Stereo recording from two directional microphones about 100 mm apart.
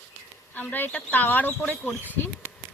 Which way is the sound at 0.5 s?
20° left (ahead or behind).